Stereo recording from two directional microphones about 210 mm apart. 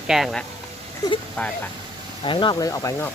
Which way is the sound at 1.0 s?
20° left (ahead or behind).